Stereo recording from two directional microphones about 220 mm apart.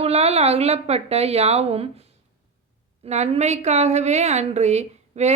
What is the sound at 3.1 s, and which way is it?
A woman's voice, 30° right (ahead or behind).